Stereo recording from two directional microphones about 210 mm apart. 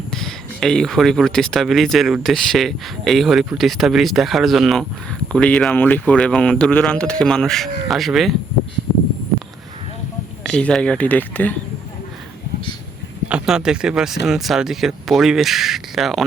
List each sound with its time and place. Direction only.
0.1 s speech: centre (ahead or behind)
10.4 s speech: 5° left (ahead or behind)
13.2 s speech: 5° right (ahead or behind)